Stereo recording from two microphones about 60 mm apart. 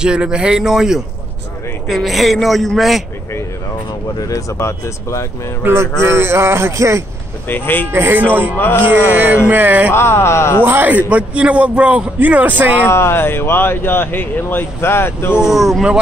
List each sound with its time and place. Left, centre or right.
0.0 s speech: centre
4.2 s speech: left
4.6 s speech: left
5.6 s a man's voice: right
7.4 s speech: left
7.9 s speech: right
8.2 s speech: right
8.5 s speech: left
9.0 s a man's voice: right
9.9 s speech: left
10.6 s a man's voice: right
12.9 s speech: left
15.3 s speech: centre